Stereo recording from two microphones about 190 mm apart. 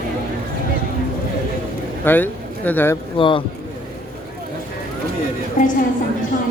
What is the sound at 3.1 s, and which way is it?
Speech, 25° left (ahead or behind).